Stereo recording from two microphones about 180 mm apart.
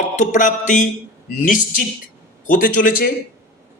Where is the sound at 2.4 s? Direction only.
50° left (ahead or behind).